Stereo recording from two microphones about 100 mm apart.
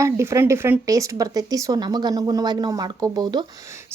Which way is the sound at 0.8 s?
35° right (ahead or behind).